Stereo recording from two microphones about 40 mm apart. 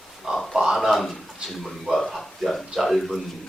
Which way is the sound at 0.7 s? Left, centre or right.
Centre.